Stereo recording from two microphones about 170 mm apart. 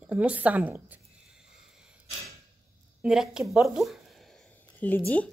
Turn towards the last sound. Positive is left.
turn(degrees=5)  # may be behind; listen again after turning